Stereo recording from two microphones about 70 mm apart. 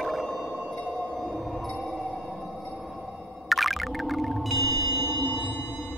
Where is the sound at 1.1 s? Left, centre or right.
Centre.